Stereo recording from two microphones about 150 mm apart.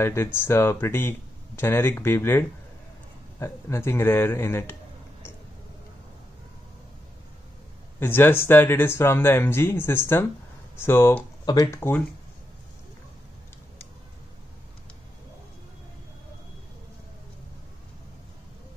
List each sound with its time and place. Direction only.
0.0 s speech: 15° left (ahead or behind)
8.0 s speech: 15° left (ahead or behind)
11.4 s speech: 25° left (ahead or behind)